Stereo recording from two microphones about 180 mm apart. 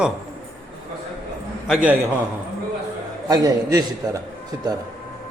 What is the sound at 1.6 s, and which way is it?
Speech, 5° right (ahead or behind).